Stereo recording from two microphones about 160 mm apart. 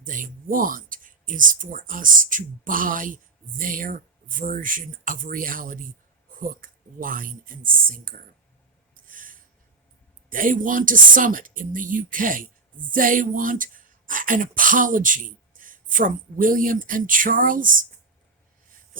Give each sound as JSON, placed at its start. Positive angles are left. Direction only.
{"t": 0.0, "sound": "speech", "side_deg": -55}
{"t": 9.0, "sound": "snort", "side_deg": -60}
{"t": 10.2, "sound": "speech", "side_deg": -60}